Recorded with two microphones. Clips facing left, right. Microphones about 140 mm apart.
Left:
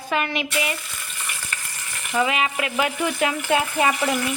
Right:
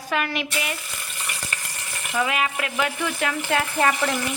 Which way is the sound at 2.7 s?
20° left (ahead or behind).